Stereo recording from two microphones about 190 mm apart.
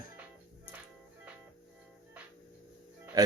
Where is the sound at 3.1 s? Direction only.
20° right (ahead or behind).